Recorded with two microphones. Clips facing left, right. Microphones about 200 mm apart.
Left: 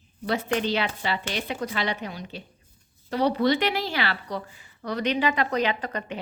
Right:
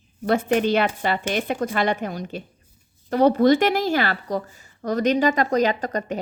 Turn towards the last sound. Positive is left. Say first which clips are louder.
# right 5 dB
turn(degrees=-45)  # may be behind; listen again after turning